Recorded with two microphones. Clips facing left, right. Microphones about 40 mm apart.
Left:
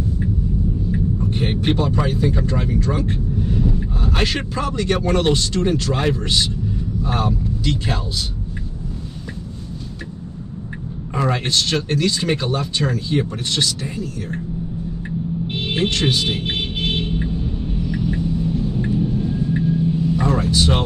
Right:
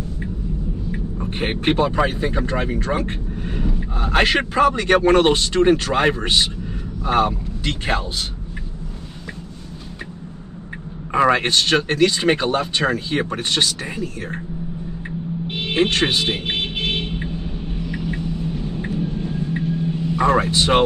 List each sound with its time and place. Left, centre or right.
0.9 s rumble: right
1.8 s a man's voice: right
11.1 s speech: right
15.7 s speech: right
18.8 s thunder: right
20.2 s speech: right